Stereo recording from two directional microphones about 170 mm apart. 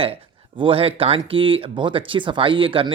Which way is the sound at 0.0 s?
35° right (ahead or behind).